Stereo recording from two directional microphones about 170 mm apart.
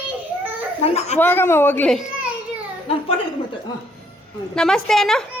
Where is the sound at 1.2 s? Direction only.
15° left (ahead or behind).